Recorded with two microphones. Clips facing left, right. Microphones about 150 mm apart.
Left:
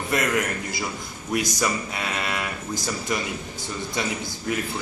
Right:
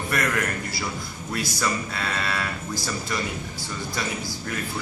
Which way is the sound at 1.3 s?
15° left (ahead or behind).